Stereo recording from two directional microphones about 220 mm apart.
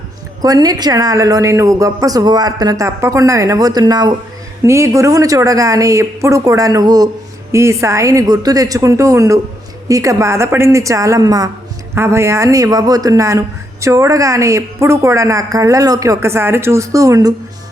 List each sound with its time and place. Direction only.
0.4 s a woman's voice: 15° right (ahead or behind)